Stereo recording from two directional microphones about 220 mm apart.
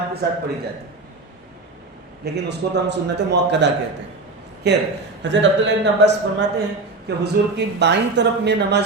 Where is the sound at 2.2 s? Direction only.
50° right (ahead or behind).